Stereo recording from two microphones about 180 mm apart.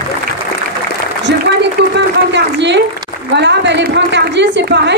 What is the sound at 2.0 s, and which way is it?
A woman's voice, 75° right (ahead or behind).